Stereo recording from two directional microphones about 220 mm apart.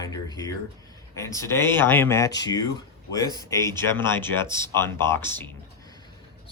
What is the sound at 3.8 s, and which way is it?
Speech, 10° left (ahead or behind).